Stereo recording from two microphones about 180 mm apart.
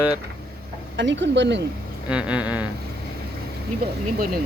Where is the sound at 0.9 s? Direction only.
80° right.